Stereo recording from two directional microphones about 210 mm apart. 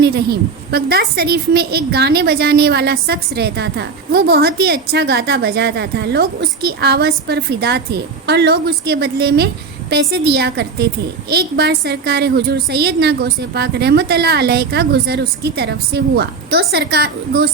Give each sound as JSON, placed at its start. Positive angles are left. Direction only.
{"t": 0.0, "sound": "a woman's voice", "side_deg": -50}